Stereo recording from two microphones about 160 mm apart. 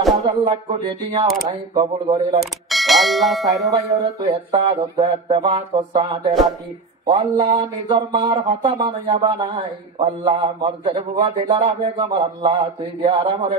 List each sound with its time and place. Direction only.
0.2 s a man's voice: 30° right (ahead or behind)
2.7 s speech: centre (ahead or behind)
3.7 s a man's voice: 25° right (ahead or behind)